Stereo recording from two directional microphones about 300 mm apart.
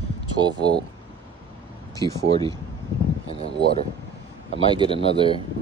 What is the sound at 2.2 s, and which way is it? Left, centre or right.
Speech, centre.